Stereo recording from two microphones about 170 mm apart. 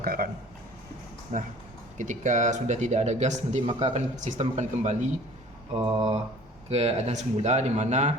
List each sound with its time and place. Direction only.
0.0 s speech: 60° right (ahead or behind)
1.3 s speech: 45° right (ahead or behind)